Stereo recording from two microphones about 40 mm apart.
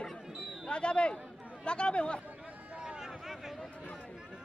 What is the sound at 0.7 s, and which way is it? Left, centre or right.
Speech, left.